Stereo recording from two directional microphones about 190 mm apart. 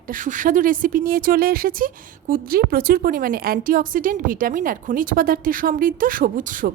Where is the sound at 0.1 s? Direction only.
45° right (ahead or behind).